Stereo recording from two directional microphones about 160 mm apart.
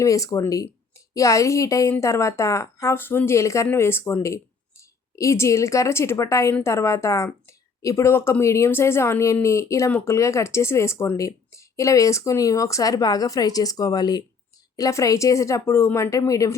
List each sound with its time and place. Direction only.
0.0 s a woman's voice: 20° left (ahead or behind)